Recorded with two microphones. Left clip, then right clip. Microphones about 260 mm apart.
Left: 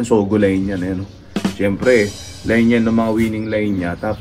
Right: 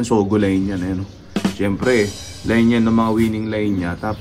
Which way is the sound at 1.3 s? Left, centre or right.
Centre.